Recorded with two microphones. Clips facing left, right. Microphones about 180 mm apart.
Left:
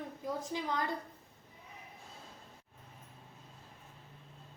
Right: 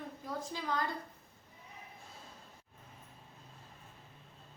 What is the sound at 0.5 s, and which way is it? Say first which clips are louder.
Speech: left 4 dB; 15° left (ahead or behind).